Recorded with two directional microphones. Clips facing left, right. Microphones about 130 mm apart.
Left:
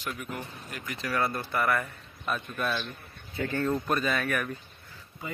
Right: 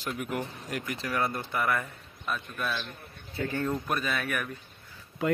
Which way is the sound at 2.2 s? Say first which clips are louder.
Left 2 dB; centre (ahead or behind).